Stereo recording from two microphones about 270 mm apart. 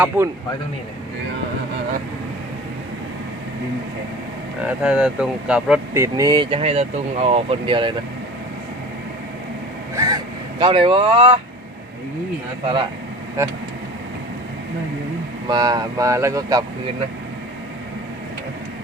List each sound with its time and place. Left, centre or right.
0.1 s speech: centre
4.6 s speech: centre
9.9 s vehicle: centre
10.6 s speech: centre
12.6 s speech: centre
15.4 s speech: centre